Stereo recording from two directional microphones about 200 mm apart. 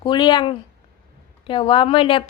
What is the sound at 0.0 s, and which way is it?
A woman's voice, 20° left (ahead or behind).